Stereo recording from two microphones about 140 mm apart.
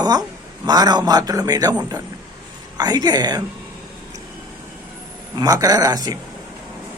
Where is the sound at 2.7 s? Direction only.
30° right (ahead or behind).